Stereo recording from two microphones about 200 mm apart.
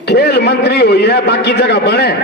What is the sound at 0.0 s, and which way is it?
A man's voice, 55° left (ahead or behind).